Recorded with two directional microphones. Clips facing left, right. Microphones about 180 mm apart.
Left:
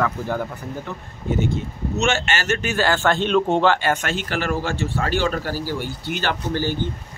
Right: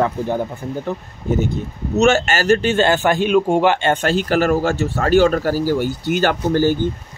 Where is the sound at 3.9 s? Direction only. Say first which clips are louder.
Right 7 dB; 35° right (ahead or behind).